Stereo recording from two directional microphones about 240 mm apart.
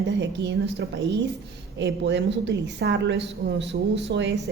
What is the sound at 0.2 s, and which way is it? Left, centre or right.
A woman's voice, right.